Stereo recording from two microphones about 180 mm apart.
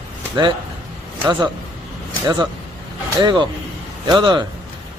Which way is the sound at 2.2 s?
25° right (ahead or behind).